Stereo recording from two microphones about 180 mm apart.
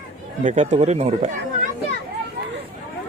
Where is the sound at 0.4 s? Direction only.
40° right (ahead or behind).